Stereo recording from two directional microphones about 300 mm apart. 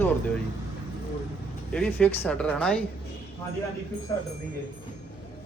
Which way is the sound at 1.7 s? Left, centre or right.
Centre.